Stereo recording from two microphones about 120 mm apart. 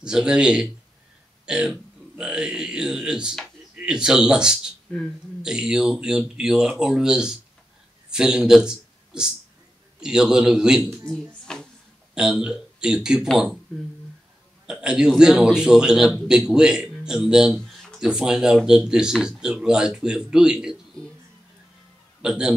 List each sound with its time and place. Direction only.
0.0 s speech: 5° right (ahead or behind)
11.1 s speech: 5° left (ahead or behind)
12.1 s speech: 5° right (ahead or behind)
14.7 s a man's voice: 5° right (ahead or behind)
17.6 s a sound: 5° left (ahead or behind)
18.0 s speech: 5° right (ahead or behind)
22.2 s a man's voice: 5° right (ahead or behind)